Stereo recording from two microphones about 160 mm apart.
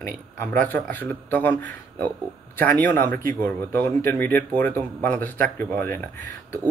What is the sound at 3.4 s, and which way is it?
Speech, 15° left (ahead or behind).